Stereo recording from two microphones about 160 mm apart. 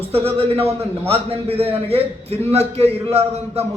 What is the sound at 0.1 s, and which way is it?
A man's voice, 35° right (ahead or behind).